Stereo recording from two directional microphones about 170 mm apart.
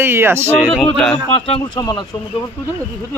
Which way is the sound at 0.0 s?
15° right (ahead or behind).